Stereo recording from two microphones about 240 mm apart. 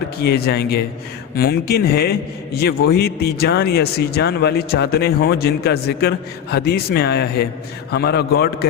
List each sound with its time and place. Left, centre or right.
0.2 s a man's voice: left